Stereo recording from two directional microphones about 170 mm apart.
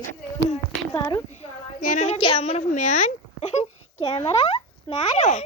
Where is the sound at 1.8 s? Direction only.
45° left (ahead or behind).